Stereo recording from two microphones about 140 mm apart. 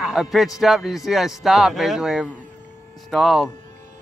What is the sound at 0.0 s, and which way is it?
A man's voice, centre (ahead or behind).